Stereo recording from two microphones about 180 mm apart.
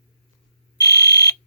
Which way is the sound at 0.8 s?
20° left (ahead or behind).